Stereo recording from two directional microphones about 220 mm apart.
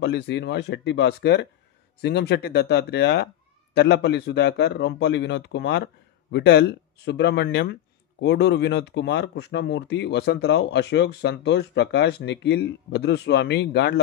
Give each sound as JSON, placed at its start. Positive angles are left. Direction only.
{"t": 0.0, "sound": "speech", "side_deg": 50}